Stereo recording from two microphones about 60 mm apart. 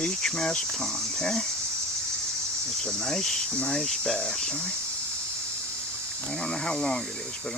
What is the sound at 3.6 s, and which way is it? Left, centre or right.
Speech, centre.